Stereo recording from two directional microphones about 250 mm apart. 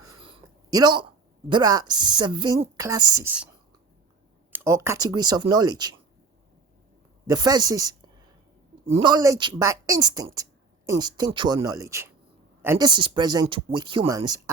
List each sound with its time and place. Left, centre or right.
0.0 s speech: right
4.5 s speech: centre
7.3 s a woman's voice: centre